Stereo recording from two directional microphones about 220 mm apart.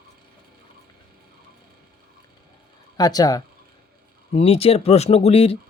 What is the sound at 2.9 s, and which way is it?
Speech, 15° left (ahead or behind).